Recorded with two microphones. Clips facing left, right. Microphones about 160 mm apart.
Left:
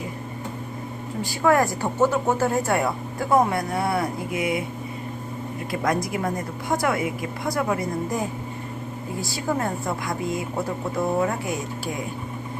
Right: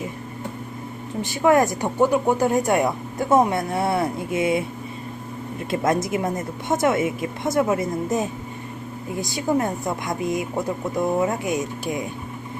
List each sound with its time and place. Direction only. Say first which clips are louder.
1.2 s speech: right 2 dB; 20° right (ahead or behind)
5.7 s speech: right 3 dB; 25° right (ahead or behind)